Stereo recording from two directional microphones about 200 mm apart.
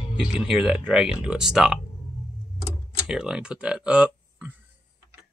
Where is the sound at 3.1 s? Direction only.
5° right (ahead or behind).